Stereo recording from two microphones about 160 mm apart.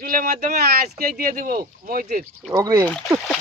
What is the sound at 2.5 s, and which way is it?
Speech, 20° right (ahead or behind).